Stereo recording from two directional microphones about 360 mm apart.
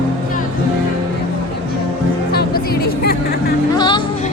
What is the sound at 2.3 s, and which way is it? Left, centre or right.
Music, left.